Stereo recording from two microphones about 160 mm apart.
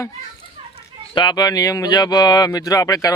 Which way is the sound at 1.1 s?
30° left (ahead or behind).